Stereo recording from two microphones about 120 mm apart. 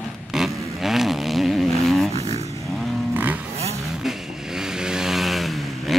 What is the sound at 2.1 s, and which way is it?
Vehicle, 65° right (ahead or behind).